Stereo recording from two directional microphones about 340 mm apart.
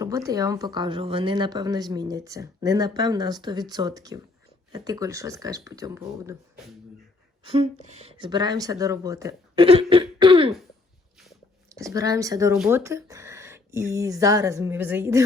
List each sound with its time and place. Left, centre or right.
0.0 s speech: centre
7.4 s speech: centre